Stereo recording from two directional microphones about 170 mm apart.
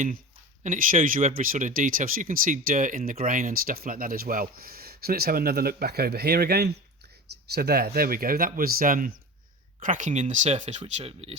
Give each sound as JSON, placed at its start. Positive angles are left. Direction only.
{"t": 0.6, "sound": "speech", "side_deg": -50}